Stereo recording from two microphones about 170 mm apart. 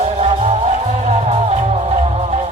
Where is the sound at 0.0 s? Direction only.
40° right (ahead or behind).